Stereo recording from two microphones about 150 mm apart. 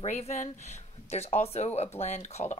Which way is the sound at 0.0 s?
50° left (ahead or behind).